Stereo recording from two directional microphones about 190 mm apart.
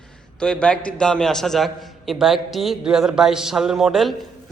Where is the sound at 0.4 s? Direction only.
5° left (ahead or behind).